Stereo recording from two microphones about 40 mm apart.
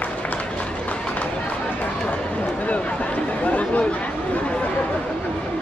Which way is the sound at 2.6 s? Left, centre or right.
Left.